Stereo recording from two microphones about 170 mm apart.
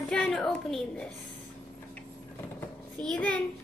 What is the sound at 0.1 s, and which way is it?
Speech, 5° left (ahead or behind).